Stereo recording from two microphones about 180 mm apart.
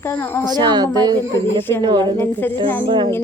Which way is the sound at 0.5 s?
25° right (ahead or behind).